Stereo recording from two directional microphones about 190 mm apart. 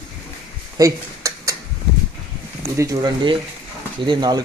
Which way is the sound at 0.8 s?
15° right (ahead or behind).